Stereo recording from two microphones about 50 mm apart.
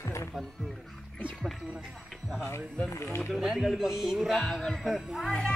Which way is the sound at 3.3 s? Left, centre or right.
Centre.